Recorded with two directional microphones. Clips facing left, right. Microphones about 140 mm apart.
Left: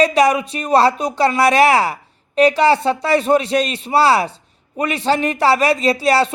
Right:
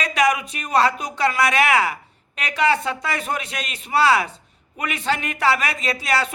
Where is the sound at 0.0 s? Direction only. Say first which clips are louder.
Left 7 dB; 30° left (ahead or behind).